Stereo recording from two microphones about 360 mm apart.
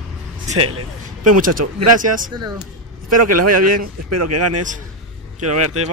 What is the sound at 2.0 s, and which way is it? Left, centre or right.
Speech, right.